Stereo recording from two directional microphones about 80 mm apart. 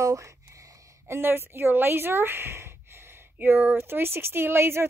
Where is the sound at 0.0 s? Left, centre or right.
Right.